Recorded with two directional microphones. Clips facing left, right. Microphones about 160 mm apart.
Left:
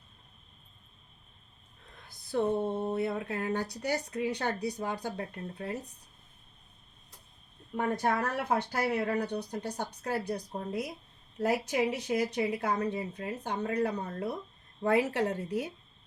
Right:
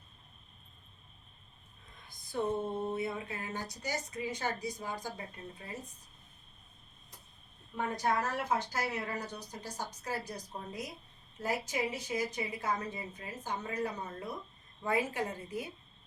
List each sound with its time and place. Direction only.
2.0 s speech: 70° left (ahead or behind)
7.8 s a woman's voice: 55° left (ahead or behind); by 15.7 s 70° left (ahead or behind)